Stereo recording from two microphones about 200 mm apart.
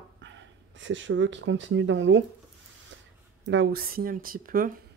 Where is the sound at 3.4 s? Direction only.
60° right (ahead or behind); by 4.7 s 45° right (ahead or behind).